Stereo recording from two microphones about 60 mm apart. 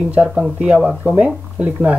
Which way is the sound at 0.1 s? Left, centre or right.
Centre.